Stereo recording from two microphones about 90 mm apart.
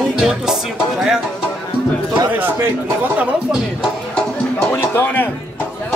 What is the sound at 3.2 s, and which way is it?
Music, 10° right (ahead or behind).